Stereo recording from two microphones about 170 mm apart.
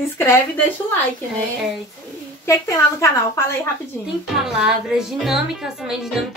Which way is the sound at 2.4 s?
20° left (ahead or behind).